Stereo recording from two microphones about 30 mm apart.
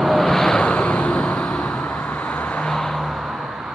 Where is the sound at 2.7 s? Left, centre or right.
Centre.